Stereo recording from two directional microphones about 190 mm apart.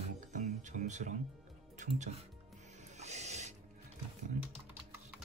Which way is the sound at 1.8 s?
40° right (ahead or behind).